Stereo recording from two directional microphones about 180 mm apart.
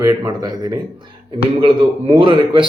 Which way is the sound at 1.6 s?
30° right (ahead or behind).